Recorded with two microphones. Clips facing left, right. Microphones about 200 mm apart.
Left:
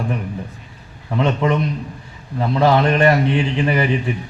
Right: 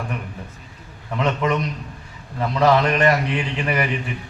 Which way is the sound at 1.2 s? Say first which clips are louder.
Left 3 dB; 30° left (ahead or behind).